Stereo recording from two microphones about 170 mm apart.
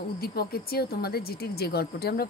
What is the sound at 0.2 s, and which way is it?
Speech, 65° left (ahead or behind).